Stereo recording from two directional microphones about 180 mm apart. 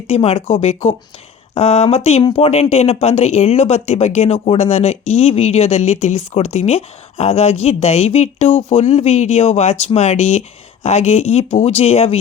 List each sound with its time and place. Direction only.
0.1 s speech: 35° left (ahead or behind)